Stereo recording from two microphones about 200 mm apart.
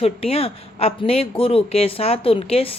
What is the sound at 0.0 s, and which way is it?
A man's voice, 30° left (ahead or behind).